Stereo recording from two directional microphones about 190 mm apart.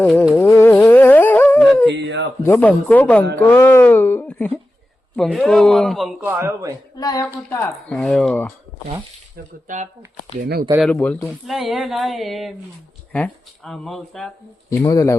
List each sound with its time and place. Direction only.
0.0 s speech: 10° left (ahead or behind)
0.3 s humming: 15° left (ahead or behind)
2.0 s a sound: 65° right (ahead or behind)
2.4 s speech: 10° left (ahead or behind)
6.2 s speech: 15° right (ahead or behind)
6.9 s speech: 20° left (ahead or behind)
7.5 s speech: 5° left (ahead or behind)
9.6 s speech: 40° right (ahead or behind)
10.4 s speech: 50° right (ahead or behind)
10.9 s speech: 5° left (ahead or behind)
14.7 s speech: 15° left (ahead or behind)